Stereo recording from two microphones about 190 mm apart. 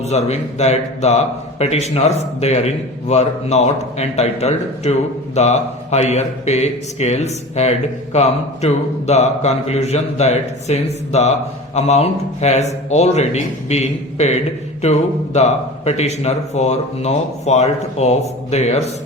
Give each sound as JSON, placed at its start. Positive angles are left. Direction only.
{"t": 0.0, "sound": "speech", "side_deg": 35}